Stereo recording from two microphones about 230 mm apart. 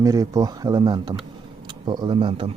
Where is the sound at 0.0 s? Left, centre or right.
Centre.